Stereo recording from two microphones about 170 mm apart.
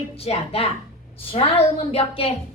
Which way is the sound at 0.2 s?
35° left (ahead or behind).